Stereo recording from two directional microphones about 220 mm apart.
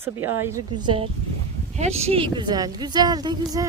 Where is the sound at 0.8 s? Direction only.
25° right (ahead or behind).